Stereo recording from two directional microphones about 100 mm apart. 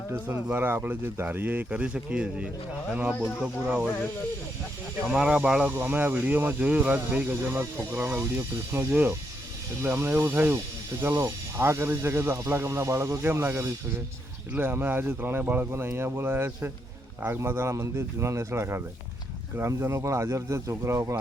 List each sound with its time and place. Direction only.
0.5 s speech: 20° right (ahead or behind)
5.0 s speech: 10° right (ahead or behind); by 21.2 s 30° right (ahead or behind)